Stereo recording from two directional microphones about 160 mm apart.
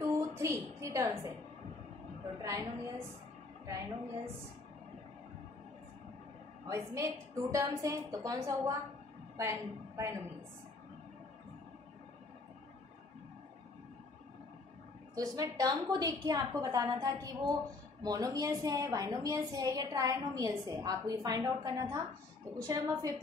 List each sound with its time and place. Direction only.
0.0 s a sound: 15° right (ahead or behind)
2.4 s a woman's voice: 20° right (ahead or behind)
6.7 s a woman's voice: 20° right (ahead or behind)
15.1 s a woman's voice: 20° right (ahead or behind)